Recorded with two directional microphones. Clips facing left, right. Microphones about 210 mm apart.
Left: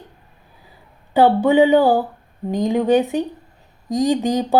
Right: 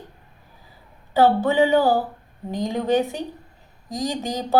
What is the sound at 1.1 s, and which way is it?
Speech, 15° left (ahead or behind).